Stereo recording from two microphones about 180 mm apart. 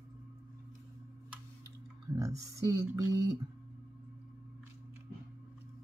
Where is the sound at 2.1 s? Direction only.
15° right (ahead or behind).